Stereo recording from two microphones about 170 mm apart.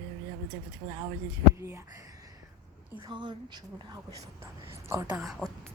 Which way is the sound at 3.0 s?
25° right (ahead or behind).